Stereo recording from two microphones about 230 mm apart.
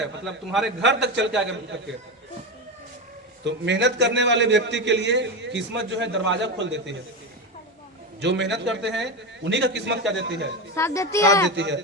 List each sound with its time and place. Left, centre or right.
0.3 s a man's voice: centre
0.8 s a man's voice: right
3.4 s a man's voice: right
8.2 s a man's voice: right
10.8 s speech: centre
11.5 s a man's voice: right